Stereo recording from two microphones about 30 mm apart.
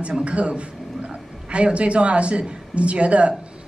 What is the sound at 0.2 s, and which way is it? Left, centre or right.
A man's voice, right.